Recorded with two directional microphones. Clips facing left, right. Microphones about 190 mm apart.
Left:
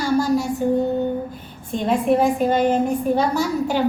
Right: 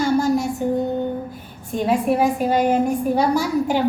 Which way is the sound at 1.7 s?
10° right (ahead or behind).